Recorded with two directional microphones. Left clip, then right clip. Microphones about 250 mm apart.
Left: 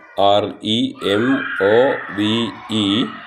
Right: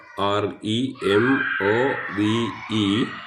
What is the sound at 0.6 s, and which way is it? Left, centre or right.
Speech, centre.